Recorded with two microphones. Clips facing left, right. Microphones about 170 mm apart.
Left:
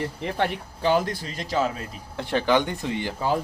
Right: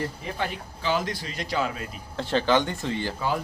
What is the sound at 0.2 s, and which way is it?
Speech, 70° left (ahead or behind).